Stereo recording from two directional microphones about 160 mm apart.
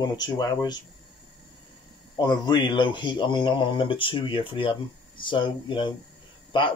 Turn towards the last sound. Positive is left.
turn(degrees=30)  # may be behind; listen again after turning